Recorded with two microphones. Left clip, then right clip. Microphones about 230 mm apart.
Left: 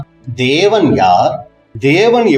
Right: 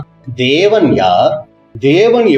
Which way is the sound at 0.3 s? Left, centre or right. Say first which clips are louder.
Right 1 dB; left.